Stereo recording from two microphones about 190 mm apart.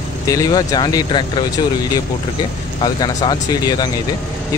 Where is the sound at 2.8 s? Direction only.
25° left (ahead or behind).